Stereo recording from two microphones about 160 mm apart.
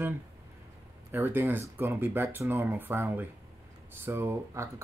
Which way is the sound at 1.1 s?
15° right (ahead or behind).